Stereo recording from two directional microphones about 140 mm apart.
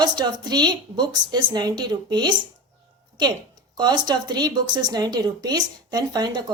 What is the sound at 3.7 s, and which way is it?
A woman's voice, 30° right (ahead or behind).